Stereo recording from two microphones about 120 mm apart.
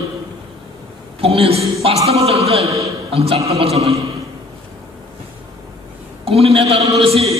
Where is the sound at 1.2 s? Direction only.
55° right (ahead or behind).